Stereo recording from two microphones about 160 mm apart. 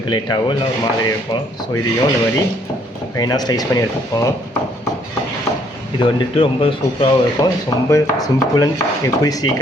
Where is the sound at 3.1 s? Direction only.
25° left (ahead or behind).